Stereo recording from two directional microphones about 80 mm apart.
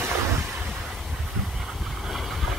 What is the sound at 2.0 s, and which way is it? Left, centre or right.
Vehicle, centre.